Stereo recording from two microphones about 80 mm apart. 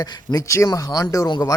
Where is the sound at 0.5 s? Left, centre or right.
Left.